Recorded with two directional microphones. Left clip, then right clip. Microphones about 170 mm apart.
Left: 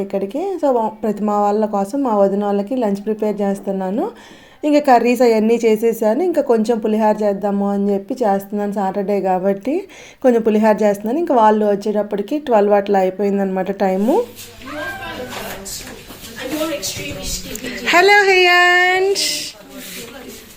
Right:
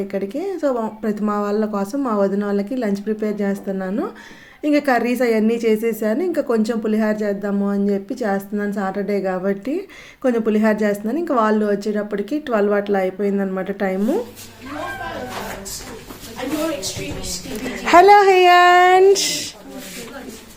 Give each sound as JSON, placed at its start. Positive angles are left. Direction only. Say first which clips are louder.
{"t": 0.1, "sound": "a woman's voice", "louder": "left 3 dB", "side_deg": 10}
{"t": 17.8, "sound": "speech", "louder": "right 1 dB", "side_deg": -20}